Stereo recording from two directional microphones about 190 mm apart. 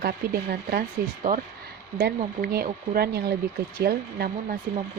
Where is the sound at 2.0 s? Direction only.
55° right (ahead or behind).